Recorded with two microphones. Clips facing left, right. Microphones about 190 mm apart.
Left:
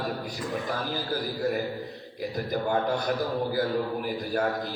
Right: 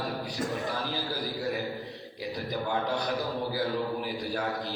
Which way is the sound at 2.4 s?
50° left (ahead or behind).